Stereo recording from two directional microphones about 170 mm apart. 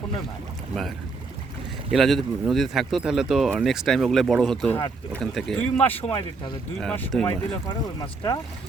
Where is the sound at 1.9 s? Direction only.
Centre (ahead or behind).